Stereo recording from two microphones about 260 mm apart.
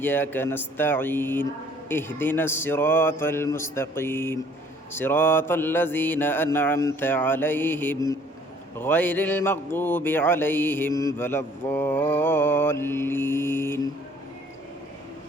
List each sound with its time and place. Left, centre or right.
0.0 s mantra: centre